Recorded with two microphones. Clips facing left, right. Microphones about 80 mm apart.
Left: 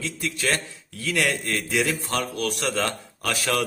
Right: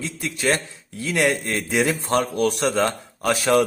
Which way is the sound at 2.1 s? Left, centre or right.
Right.